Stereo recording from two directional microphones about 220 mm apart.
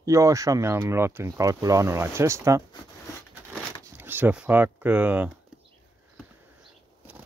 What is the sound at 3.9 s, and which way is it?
Speech, 10° right (ahead or behind).